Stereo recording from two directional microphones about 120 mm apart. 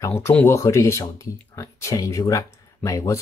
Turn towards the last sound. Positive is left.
turn(degrees=25)  # may be behind; listen again after turning